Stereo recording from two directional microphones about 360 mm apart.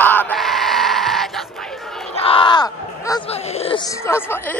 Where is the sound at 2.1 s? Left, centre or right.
Centre.